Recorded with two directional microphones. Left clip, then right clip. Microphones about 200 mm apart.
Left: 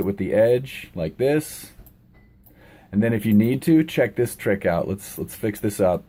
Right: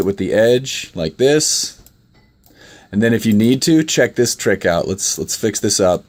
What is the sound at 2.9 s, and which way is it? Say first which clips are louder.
Speech: right 7 dB; 35° right (ahead or behind).